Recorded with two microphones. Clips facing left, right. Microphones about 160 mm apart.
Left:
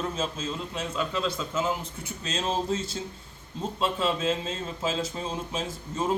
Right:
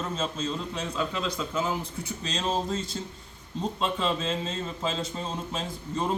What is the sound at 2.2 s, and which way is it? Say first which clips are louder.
Speech: left 1 dB; 5° left (ahead or behind).